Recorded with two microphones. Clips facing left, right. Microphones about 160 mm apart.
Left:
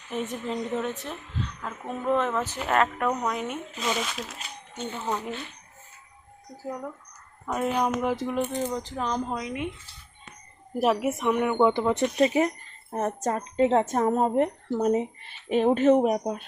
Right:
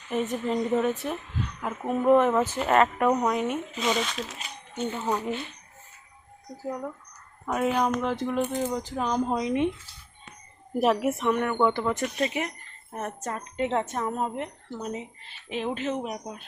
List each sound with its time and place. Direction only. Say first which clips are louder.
0.1 s a woman's voice: right 4 dB; centre (ahead or behind)
2.6 s a woman's voice: even; 5° right (ahead or behind)
5.0 s a woman's voice: right 1 dB; 10° right (ahead or behind)
6.7 s a woman's voice: right 1 dB; centre (ahead or behind)
9.3 s speech: right 6 dB; 30° right (ahead or behind)
10.8 s speech: even; 5° left (ahead or behind)
12.2 s speech: left 7 dB; 35° left (ahead or behind)